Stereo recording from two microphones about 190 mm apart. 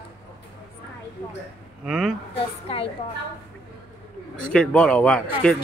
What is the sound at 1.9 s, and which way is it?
Speech, centre (ahead or behind).